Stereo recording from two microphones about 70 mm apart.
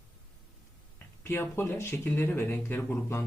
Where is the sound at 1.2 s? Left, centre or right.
Left.